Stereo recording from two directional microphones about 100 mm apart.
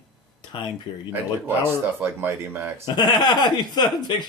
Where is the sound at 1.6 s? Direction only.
25° right (ahead or behind).